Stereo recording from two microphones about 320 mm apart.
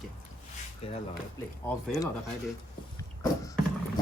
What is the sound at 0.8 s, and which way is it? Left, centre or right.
Speech, centre.